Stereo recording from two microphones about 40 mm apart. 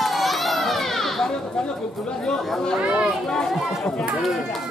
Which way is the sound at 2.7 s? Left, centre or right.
Centre.